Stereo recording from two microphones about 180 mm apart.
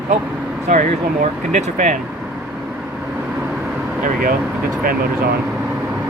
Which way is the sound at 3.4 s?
5° right (ahead or behind).